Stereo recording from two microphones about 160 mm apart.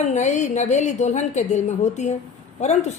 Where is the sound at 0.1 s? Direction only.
45° left (ahead or behind).